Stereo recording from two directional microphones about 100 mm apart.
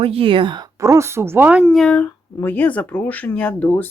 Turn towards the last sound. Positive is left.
turn(degrees=15)  # may be behind; listen again after turning